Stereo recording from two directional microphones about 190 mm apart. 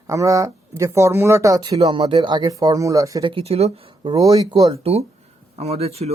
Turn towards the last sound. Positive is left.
turn(degrees=-35)  # may be behind; listen again after turning